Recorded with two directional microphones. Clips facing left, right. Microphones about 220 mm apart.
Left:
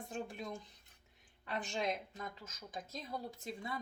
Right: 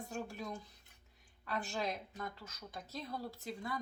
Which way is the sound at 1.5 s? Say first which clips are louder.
Left 1 dB; 20° left (ahead or behind).